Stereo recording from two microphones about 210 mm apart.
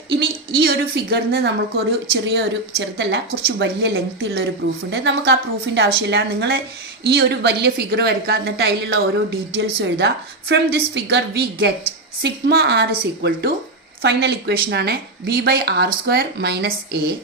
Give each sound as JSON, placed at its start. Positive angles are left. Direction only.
{"t": 0.1, "sound": "a woman's voice", "side_deg": -50}